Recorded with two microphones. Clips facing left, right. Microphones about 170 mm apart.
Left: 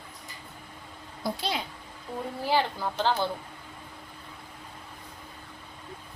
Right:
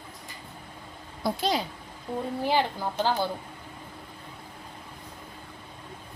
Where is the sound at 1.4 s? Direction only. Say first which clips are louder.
Right 7 dB; 40° right (ahead or behind).